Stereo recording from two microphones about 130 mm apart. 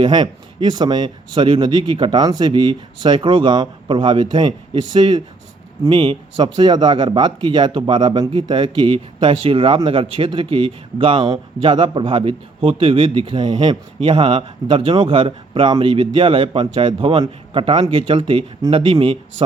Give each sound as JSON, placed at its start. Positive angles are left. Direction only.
{"t": 0.0, "sound": "speech", "side_deg": -35}